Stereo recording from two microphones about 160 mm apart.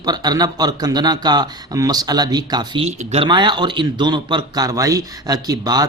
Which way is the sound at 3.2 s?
30° right (ahead or behind).